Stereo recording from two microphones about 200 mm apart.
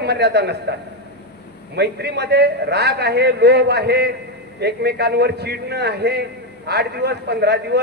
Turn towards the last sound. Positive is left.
turn(degrees=-55)  # may be behind; listen again after turning